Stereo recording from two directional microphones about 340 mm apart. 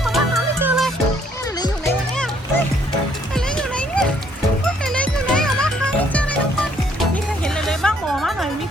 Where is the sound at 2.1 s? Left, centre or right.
Centre.